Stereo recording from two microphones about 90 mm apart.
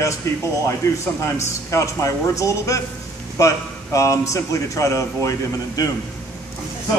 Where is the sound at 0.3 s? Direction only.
35° left (ahead or behind).